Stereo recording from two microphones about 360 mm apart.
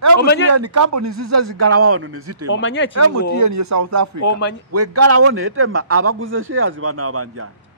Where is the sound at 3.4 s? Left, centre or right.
Right.